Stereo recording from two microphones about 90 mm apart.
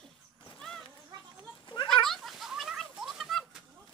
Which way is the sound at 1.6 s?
60° left (ahead or behind).